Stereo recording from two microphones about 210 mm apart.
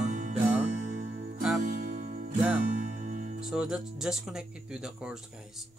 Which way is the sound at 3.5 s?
5° right (ahead or behind).